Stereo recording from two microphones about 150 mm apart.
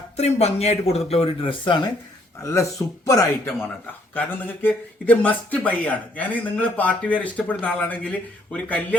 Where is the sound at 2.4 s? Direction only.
20° left (ahead or behind).